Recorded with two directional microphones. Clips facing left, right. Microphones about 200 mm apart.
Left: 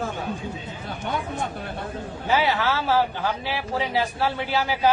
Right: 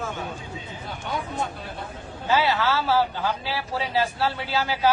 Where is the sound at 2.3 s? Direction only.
15° left (ahead or behind).